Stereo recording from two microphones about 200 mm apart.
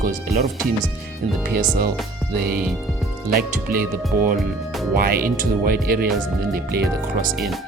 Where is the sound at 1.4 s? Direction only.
45° right (ahead or behind).